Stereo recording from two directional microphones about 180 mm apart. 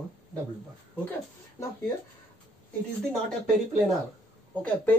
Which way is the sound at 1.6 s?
15° left (ahead or behind).